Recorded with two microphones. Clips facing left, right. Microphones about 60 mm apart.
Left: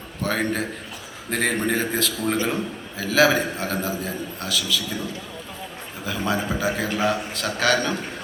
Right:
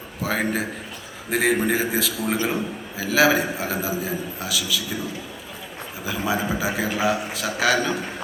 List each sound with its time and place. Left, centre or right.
0.2 s a man's voice: centre